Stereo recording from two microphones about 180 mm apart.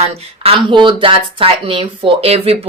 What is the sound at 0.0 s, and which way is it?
A woman's voice, 35° right (ahead or behind).